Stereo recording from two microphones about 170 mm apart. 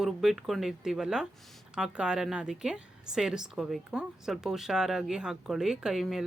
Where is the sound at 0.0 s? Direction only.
Centre (ahead or behind).